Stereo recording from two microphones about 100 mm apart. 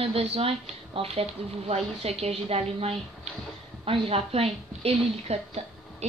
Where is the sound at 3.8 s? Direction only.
70° right (ahead or behind).